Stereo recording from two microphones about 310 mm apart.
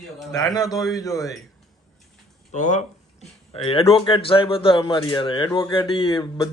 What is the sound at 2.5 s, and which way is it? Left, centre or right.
A man's voice, left.